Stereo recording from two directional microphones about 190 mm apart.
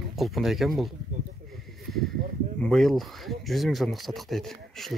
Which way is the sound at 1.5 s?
Centre (ahead or behind).